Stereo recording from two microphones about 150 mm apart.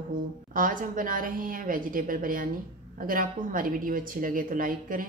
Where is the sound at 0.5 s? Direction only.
65° right (ahead or behind).